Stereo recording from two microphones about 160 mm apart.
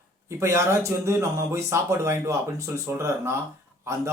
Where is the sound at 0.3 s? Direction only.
20° right (ahead or behind).